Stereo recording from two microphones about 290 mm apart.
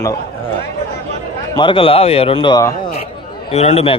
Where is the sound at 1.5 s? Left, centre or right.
Centre.